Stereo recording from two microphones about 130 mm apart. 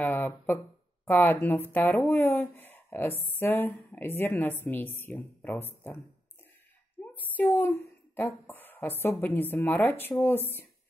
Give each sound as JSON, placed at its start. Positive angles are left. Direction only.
{"t": 0.0, "sound": "a woman's voice", "side_deg": 15}
{"t": 7.2, "sound": "a woman's voice", "side_deg": 15}